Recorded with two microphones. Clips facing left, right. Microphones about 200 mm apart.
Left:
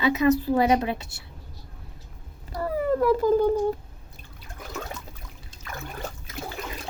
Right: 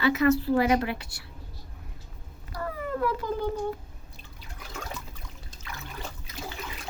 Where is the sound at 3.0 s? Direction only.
40° left (ahead or behind).